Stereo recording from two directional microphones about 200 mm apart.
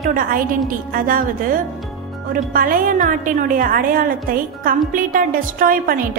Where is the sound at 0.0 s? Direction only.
45° right (ahead or behind).